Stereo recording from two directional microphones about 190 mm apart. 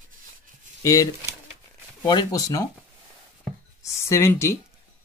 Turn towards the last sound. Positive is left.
turn(degrees=15)  # may be behind; listen again after turning